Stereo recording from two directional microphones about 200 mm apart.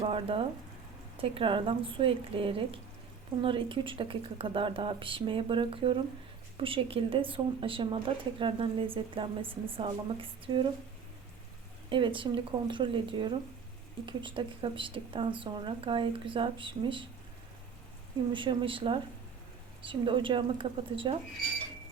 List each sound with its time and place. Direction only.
0.0 s speech: 25° right (ahead or behind)
11.9 s speech: 25° right (ahead or behind)
18.3 s speech: 25° right (ahead or behind)